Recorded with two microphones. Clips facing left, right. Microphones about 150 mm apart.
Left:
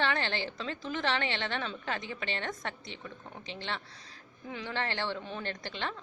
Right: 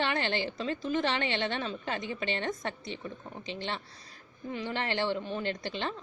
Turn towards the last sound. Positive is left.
turn(degrees=-15)  # may be behind; listen again after turning